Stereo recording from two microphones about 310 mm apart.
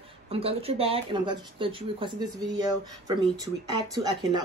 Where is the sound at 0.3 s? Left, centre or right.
Centre.